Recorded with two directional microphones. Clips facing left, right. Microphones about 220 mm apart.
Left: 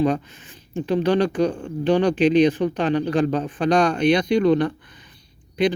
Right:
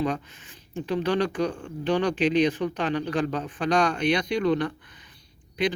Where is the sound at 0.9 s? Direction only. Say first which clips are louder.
Left 5 dB; 25° left (ahead or behind).